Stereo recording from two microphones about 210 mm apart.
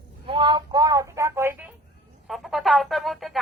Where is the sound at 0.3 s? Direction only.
25° right (ahead or behind).